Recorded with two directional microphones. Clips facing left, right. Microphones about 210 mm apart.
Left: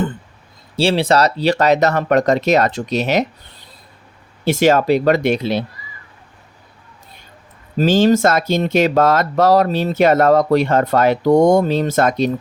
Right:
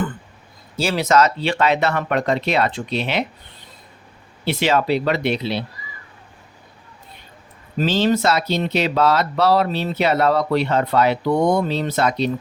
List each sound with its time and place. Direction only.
0.8 s speech: 30° left (ahead or behind)
4.4 s speech: 45° left (ahead or behind)
7.8 s speech: 45° left (ahead or behind)